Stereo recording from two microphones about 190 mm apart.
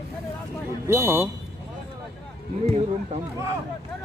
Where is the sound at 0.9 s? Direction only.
10° right (ahead or behind).